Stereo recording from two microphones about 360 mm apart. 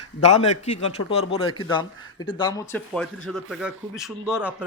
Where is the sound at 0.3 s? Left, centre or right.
Centre.